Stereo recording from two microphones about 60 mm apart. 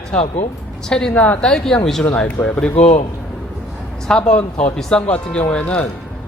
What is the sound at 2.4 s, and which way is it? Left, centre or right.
Speech, left.